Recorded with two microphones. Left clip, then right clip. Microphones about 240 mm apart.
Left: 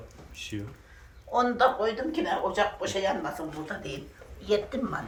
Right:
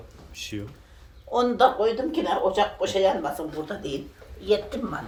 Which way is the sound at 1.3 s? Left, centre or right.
Right.